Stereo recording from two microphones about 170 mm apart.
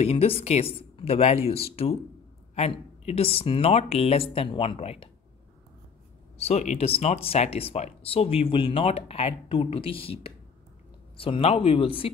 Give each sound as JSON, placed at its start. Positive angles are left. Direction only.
{"t": 0.0, "sound": "speech", "side_deg": 35}
{"t": 6.3, "sound": "speech", "side_deg": 35}